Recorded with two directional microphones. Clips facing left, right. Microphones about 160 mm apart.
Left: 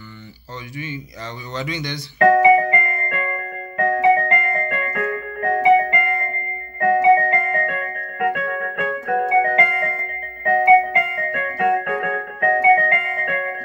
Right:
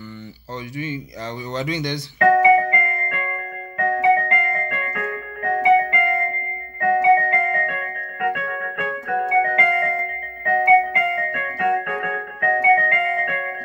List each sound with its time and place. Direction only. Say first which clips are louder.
1.5 s speech: right 2 dB; 45° right (ahead or behind)
2.1 s keyboard: left 2 dB; 35° left (ahead or behind)